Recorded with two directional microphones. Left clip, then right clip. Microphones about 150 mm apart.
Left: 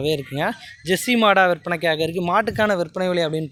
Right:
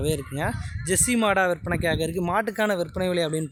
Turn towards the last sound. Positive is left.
turn(degrees=-10)  # may be behind; listen again after turning